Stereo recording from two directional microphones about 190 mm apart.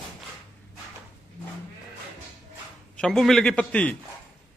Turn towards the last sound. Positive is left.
turn(degrees=5)  # may be behind; listen again after turning